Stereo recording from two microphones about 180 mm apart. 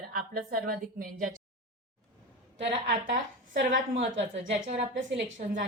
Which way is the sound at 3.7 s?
45° right (ahead or behind).